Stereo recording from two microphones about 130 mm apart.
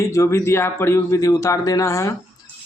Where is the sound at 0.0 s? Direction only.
25° left (ahead or behind).